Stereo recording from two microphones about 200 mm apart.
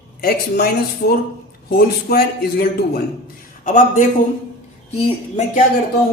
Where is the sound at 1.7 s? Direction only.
50° left (ahead or behind); by 5.6 s 35° left (ahead or behind).